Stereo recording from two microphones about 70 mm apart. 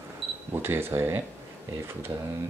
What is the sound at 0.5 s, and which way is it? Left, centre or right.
Speech, right.